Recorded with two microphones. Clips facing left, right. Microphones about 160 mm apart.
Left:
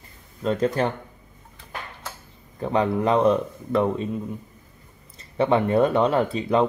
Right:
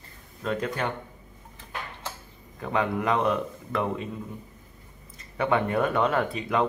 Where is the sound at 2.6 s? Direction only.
30° left (ahead or behind).